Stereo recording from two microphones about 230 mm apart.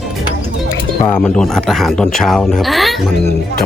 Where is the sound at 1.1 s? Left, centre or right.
Centre.